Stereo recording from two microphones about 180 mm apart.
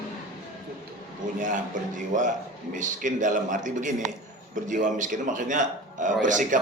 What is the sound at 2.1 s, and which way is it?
A man's voice, 45° right (ahead or behind).